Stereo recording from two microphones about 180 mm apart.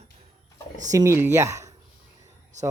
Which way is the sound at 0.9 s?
15° right (ahead or behind).